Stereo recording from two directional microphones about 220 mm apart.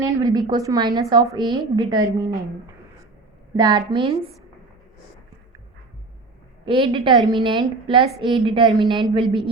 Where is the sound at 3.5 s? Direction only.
20° right (ahead or behind).